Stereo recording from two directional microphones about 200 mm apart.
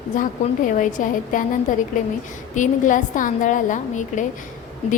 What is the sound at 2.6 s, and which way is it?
A woman's voice, 40° left (ahead or behind).